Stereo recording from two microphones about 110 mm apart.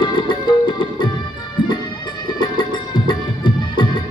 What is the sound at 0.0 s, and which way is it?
Music, 45° left (ahead or behind).